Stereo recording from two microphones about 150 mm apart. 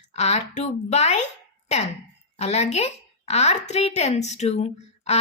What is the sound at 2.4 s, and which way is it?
A woman's voice, 45° left (ahead or behind).